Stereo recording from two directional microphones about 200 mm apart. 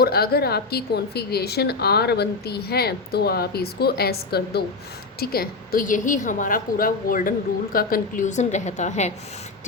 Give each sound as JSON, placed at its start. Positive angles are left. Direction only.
{"t": 0.0, "sound": "a woman's voice", "side_deg": 50}